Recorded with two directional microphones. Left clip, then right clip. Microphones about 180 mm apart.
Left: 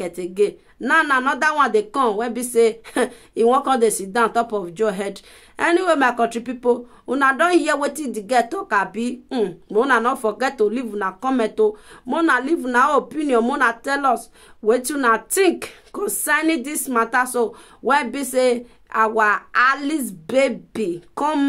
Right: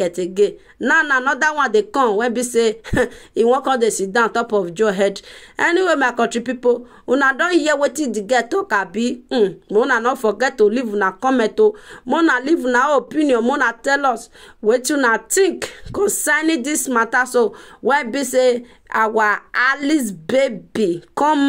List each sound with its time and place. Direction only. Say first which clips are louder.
0.0 s speech: right 4 dB; 25° right (ahead or behind)